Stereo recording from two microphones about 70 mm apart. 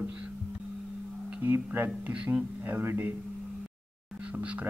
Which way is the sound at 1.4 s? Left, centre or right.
Right.